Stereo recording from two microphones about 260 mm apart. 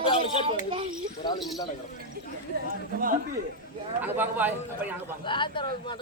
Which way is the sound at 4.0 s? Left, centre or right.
Centre.